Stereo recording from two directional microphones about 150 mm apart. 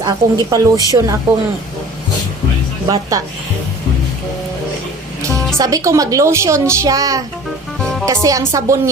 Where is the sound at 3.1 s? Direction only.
25° right (ahead or behind).